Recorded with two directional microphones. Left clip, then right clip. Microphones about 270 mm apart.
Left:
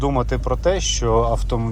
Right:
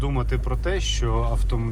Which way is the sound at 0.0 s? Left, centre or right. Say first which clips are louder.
Left 8 dB; centre.